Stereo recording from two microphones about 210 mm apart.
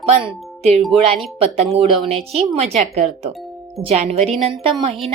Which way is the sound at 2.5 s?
30° right (ahead or behind).